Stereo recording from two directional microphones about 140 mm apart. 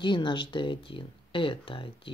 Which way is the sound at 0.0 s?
35° left (ahead or behind).